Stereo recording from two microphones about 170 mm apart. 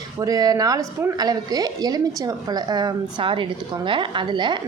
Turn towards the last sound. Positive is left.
turn(degrees=-25)  # may be behind; listen again after turning